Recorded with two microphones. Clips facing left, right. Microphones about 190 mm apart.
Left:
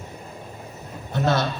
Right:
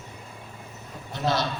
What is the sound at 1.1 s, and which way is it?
Speech, 50° left (ahead or behind).